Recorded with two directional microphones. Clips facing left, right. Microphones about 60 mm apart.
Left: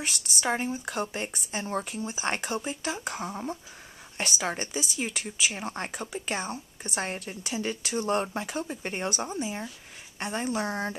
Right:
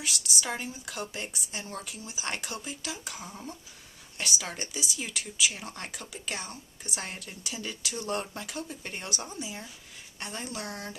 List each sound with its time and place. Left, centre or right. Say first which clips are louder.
0.0 s speech: left 3 dB; left